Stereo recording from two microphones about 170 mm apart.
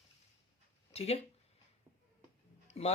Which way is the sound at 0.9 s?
35° left (ahead or behind).